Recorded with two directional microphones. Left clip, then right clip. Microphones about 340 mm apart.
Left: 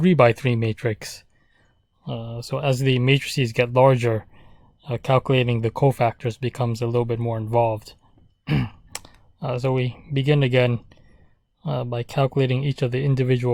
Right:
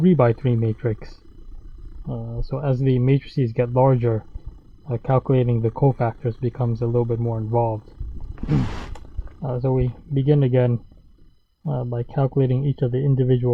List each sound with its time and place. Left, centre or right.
0.0 s speech: left
9.4 s speech: left